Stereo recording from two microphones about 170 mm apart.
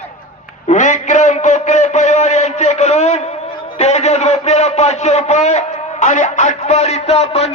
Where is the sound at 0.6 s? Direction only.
45° left (ahead or behind).